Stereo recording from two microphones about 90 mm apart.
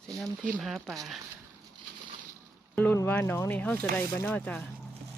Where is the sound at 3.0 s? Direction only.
25° left (ahead or behind).